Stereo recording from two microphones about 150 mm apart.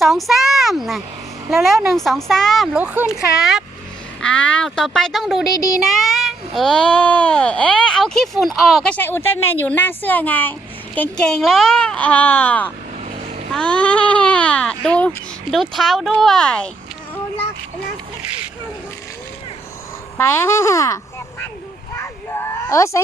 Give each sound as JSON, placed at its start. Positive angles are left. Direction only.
{"t": 0.0, "sound": "a child's voice", "side_deg": 0}
{"t": 20.1, "sound": "speech", "side_deg": 15}
{"t": 21.9, "sound": "a sound", "side_deg": 15}